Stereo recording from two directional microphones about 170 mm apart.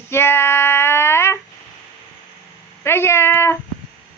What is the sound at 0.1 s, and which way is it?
Child singing, 15° left (ahead or behind).